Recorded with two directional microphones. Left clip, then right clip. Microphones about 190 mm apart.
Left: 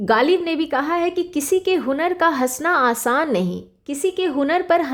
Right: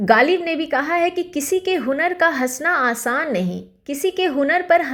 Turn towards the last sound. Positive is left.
turn(degrees=20)  # may be behind; listen again after turning